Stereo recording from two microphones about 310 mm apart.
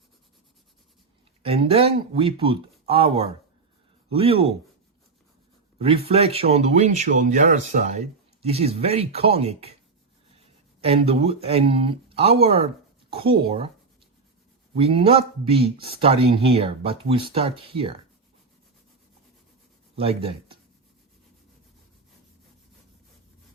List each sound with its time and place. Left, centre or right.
1.4 s speech: centre
5.8 s speech: centre
14.8 s speech: centre
20.0 s speech: centre